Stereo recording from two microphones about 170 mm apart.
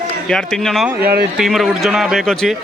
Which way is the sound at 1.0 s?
65° right (ahead or behind).